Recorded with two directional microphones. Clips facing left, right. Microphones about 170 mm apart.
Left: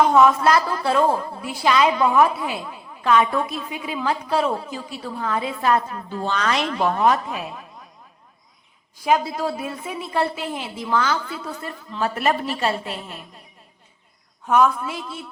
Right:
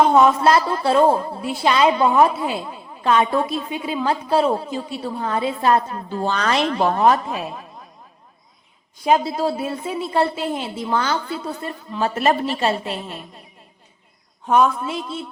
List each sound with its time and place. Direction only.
0.0 s a woman's voice: 25° right (ahead or behind)
9.0 s a woman's voice: 30° right (ahead or behind)
14.4 s a woman's voice: 25° right (ahead or behind)